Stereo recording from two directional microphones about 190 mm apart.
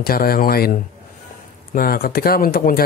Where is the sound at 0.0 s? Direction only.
55° left (ahead or behind).